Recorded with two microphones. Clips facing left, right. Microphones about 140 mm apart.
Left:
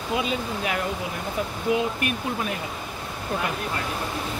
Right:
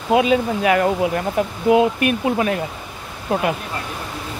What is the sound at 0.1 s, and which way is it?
Speech, 80° right.